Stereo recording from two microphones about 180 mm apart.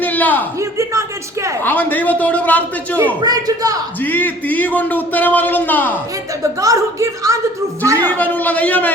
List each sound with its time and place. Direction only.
0.0 s a sound: 10° left (ahead or behind)
0.6 s a woman's voice: 15° right (ahead or behind)
1.6 s a man's voice: 10° left (ahead or behind)
3.2 s speech: 20° right (ahead or behind)
4.0 s a man's voice: 10° left (ahead or behind)
6.4 s a woman's voice: 20° right (ahead or behind)
8.0 s a man's voice: 10° left (ahead or behind)